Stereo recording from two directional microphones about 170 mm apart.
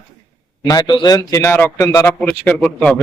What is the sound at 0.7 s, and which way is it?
A man's voice, 25° left (ahead or behind).